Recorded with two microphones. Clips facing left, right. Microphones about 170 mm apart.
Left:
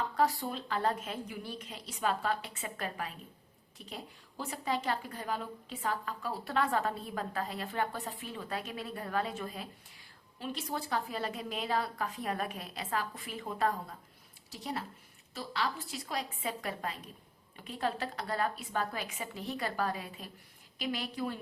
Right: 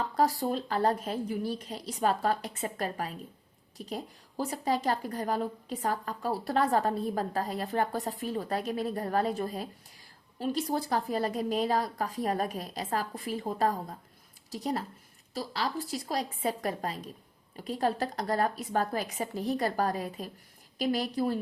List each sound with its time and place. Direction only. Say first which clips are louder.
0.2 s a woman's voice: right 4 dB; 40° right (ahead or behind)